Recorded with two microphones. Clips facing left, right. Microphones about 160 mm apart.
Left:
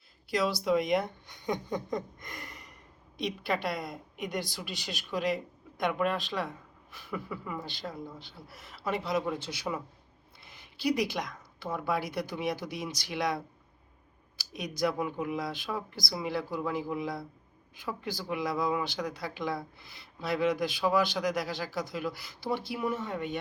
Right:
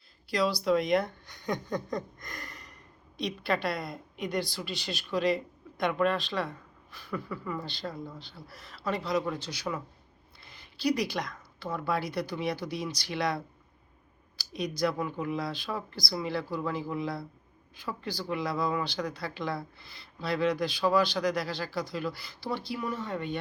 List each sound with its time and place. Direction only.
0.3 s a woman's voice: 20° left (ahead or behind)
10.8 s a woman's voice: 20° left (ahead or behind)
14.8 s a woman's voice: 15° left (ahead or behind)